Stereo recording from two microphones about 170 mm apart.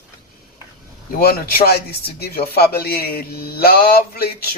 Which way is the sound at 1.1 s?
65° left (ahead or behind).